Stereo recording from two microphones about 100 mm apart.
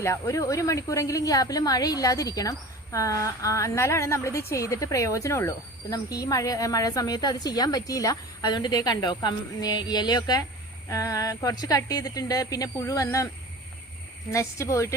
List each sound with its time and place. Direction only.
0.0 s speech: 30° left (ahead or behind)
14.3 s speech: 30° left (ahead or behind)